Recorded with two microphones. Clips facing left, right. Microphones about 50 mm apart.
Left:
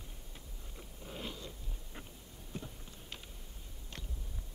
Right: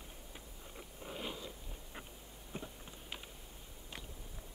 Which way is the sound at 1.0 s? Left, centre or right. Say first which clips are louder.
Right 1 dB; right.